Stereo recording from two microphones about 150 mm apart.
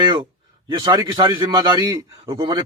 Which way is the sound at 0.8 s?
30° right (ahead or behind).